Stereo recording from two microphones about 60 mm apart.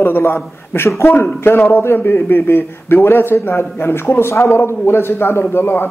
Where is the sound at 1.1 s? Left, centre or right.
Left.